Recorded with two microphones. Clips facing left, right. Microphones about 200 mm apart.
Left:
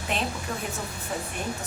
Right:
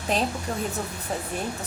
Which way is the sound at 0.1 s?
40° right (ahead or behind).